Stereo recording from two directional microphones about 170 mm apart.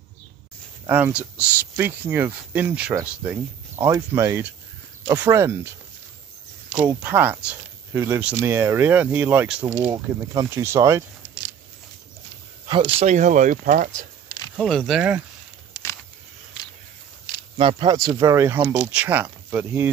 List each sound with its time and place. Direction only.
0.8 s speech: 10° right (ahead or behind)
7.0 s speech: 10° right (ahead or behind)
9.8 s speech: 20° right (ahead or behind)
12.6 s speech: 30° right (ahead or behind)
13.0 s speech: 45° right (ahead or behind)
14.6 s speech: centre (ahead or behind)
17.6 s speech: 30° right (ahead or behind)
17.9 s speech: 20° right (ahead or behind)